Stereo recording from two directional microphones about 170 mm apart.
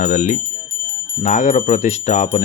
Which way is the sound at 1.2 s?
45° left (ahead or behind).